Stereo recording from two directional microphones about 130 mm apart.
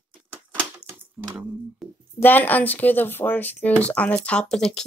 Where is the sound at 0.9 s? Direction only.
20° right (ahead or behind).